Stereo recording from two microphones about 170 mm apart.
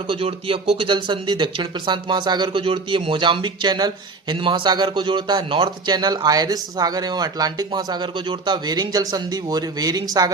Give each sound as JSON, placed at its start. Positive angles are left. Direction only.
{"t": 0.1, "sound": "speech", "side_deg": -30}